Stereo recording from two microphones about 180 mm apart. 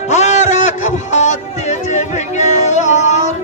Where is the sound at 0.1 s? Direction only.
40° left (ahead or behind).